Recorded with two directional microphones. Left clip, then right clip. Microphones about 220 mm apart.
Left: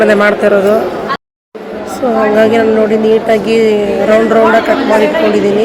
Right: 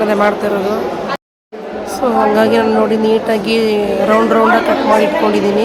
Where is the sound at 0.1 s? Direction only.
15° left (ahead or behind).